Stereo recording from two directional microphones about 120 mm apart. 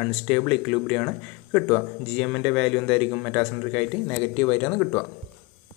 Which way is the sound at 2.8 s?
20° left (ahead or behind).